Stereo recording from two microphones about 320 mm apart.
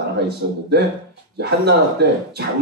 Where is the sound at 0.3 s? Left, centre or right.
Right.